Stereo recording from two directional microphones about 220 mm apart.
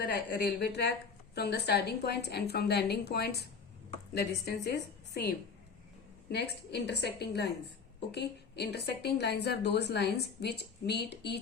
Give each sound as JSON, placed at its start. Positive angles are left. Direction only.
{"t": 0.1, "sound": "a woman's voice", "side_deg": 50}
{"t": 6.3, "sound": "a woman's voice", "side_deg": 50}